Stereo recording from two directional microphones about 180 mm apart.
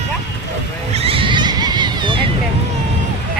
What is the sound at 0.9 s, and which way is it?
Neigh, 30° right (ahead or behind).